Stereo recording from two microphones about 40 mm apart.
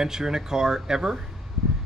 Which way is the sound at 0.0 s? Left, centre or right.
Centre.